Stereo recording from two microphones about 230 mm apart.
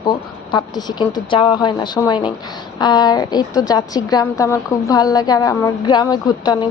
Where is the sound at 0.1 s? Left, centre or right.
Centre.